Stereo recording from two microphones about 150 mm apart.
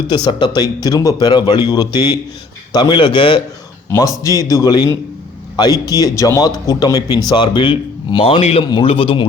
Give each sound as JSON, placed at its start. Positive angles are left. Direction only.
{"t": 0.1, "sound": "speech", "side_deg": 30}
{"t": 4.2, "sound": "speech", "side_deg": 20}
{"t": 8.6, "sound": "speech", "side_deg": 30}